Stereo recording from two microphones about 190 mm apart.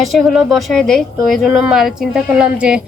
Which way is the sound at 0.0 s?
Centre (ahead or behind).